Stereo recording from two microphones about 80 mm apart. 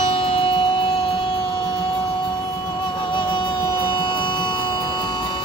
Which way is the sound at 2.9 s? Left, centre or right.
Left.